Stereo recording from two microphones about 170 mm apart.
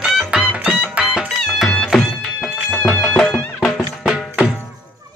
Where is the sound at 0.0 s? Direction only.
5° right (ahead or behind).